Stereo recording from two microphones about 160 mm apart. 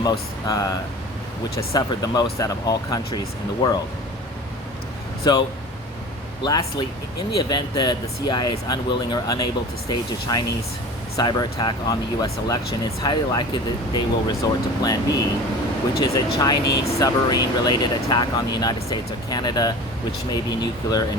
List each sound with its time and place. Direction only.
0.0 s speech: 25° left (ahead or behind)
5.2 s speech: 25° left (ahead or behind)
16.0 s speech: 20° left (ahead or behind)